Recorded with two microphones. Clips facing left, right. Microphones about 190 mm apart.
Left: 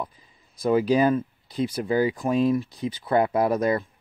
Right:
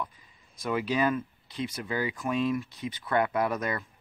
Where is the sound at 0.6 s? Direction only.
35° left (ahead or behind).